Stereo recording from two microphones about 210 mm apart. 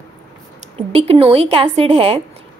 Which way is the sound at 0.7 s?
30° right (ahead or behind).